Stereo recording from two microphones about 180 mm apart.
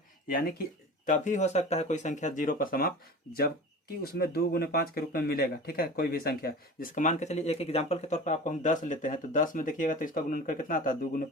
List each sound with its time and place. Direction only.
0.3 s speech: 55° left (ahead or behind)
4.0 s speech: 60° left (ahead or behind)